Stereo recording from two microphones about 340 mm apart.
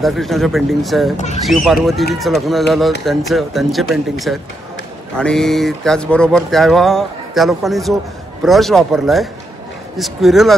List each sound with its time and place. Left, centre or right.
0.0 s speech: centre
1.1 s speech: centre
1.4 s speech: centre